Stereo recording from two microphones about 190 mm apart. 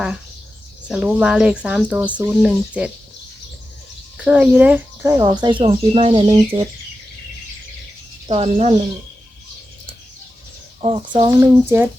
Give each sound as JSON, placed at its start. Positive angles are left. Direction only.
{"t": 0.9, "sound": "speech", "side_deg": -5}
{"t": 4.2, "sound": "speech", "side_deg": -5}
{"t": 8.3, "sound": "speech", "side_deg": -30}
{"t": 10.8, "sound": "speech", "side_deg": -25}